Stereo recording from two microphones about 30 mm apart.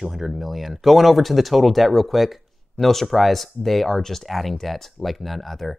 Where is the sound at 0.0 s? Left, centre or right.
Centre.